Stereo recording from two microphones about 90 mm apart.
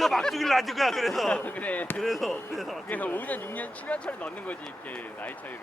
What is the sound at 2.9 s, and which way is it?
Speech, 20° left (ahead or behind).